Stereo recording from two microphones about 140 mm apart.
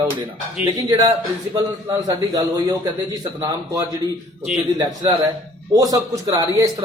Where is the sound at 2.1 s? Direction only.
30° right (ahead or behind).